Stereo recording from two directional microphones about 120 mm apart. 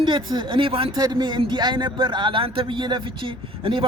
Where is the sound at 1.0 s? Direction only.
35° right (ahead or behind).